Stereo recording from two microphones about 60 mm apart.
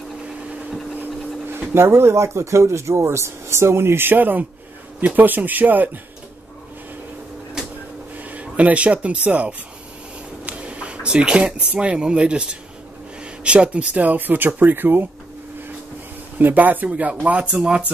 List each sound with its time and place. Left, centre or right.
0.9 s speech: right
8.2 s speech: right
16.3 s speech: right